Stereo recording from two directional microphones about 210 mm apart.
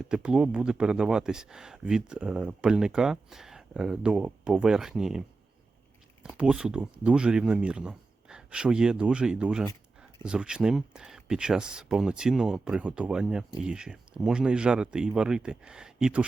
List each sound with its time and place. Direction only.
0.0 s speech: 5° right (ahead or behind)
6.2 s speech: 5° right (ahead or behind)